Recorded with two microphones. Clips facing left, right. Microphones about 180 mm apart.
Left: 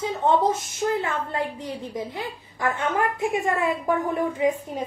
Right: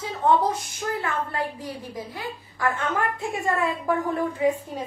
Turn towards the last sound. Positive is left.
turn(degrees=20)  # may be behind; listen again after turning